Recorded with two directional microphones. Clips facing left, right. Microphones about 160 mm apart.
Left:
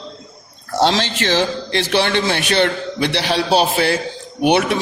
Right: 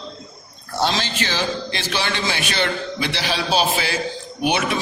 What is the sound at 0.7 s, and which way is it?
A man's voice, 80° left.